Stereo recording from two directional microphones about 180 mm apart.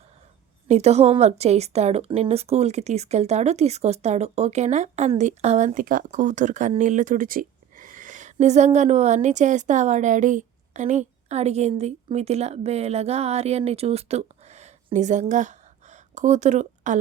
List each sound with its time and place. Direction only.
0.7 s a woman's voice: 35° right (ahead or behind)